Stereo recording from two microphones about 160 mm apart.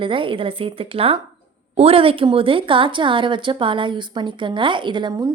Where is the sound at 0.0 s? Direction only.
35° right (ahead or behind).